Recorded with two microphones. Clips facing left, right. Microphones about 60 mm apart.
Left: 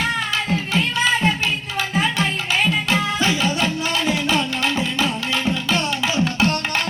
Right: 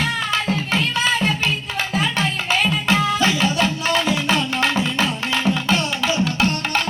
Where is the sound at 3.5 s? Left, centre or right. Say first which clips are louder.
Right 2 dB; right.